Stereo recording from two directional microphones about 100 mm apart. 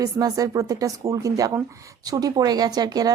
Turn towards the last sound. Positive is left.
turn(degrees=-40)  # may be behind; listen again after turning